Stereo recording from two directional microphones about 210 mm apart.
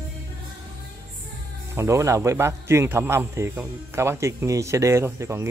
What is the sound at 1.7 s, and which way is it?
A man's voice, 15° right (ahead or behind).